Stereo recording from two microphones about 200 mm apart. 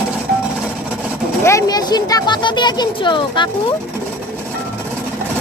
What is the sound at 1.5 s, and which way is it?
Speech, 15° left (ahead or behind).